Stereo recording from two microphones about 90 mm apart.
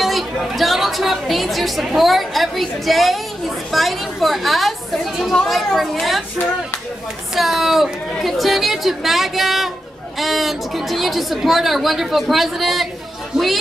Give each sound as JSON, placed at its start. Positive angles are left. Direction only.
{"t": 0.0, "sound": "a woman's voice", "side_deg": 0}
{"t": 7.3, "sound": "a woman's voice", "side_deg": 0}